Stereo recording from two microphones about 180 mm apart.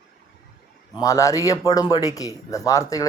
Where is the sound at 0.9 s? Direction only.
20° left (ahead or behind).